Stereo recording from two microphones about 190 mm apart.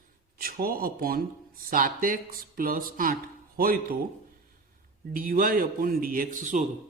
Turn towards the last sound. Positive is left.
turn(degrees=-40)  # may be behind; listen again after turning